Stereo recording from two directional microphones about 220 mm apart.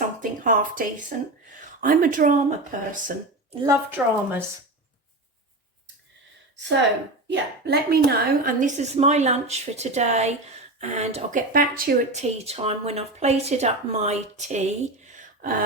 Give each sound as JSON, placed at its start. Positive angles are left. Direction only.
{"t": 0.0, "sound": "a sound", "side_deg": -35}
{"t": 1.1, "sound": "speech", "side_deg": -35}
{"t": 3.6, "sound": "a woman's voice", "side_deg": -10}
{"t": 7.7, "sound": "speech", "side_deg": -45}